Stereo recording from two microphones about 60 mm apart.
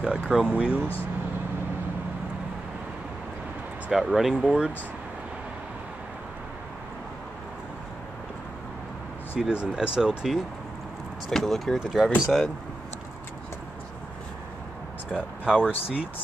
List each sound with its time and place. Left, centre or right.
0.0 s speech: centre
3.9 s speech: centre
9.4 s speech: centre
11.2 s speech: centre
15.1 s speech: centre